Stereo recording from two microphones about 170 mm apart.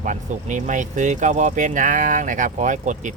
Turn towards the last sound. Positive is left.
turn(degrees=-45)  # may be behind; listen again after turning